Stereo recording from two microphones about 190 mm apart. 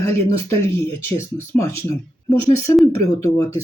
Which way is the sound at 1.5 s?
15° left (ahead or behind).